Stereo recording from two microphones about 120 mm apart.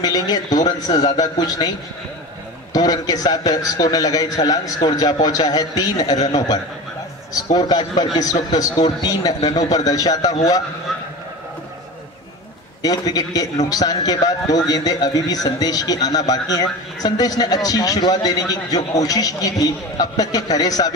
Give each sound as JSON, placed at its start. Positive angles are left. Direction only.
{"t": 0.0, "sound": "a man's voice", "side_deg": 30}
{"t": 2.7, "sound": "a man's voice", "side_deg": 30}
{"t": 12.8, "sound": "a man's voice", "side_deg": 30}